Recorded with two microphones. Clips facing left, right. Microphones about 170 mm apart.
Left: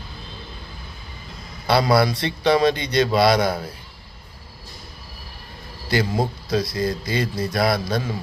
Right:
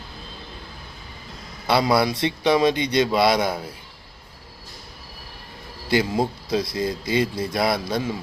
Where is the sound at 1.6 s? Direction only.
20° right (ahead or behind).